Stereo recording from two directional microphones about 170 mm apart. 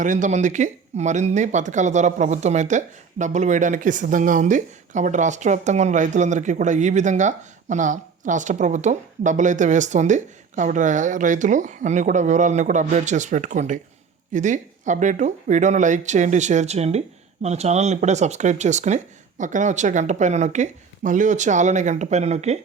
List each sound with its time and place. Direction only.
0.0 s speech: 45° right (ahead or behind)